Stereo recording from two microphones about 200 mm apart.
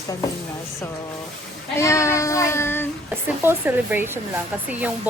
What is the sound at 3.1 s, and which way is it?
Speech, 10° right (ahead or behind).